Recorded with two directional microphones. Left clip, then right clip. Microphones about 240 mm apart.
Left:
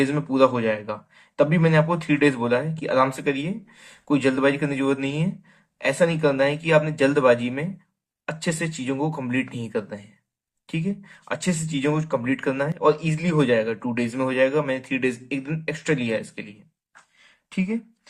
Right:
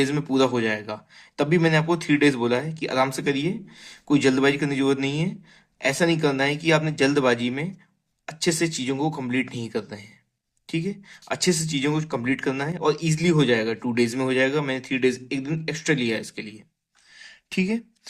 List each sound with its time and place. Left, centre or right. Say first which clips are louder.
0.0 s speech: left 3 dB; right
17.5 s speech: right 2 dB; right